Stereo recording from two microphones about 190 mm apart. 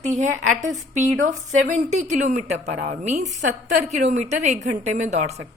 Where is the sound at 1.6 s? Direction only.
35° right (ahead or behind).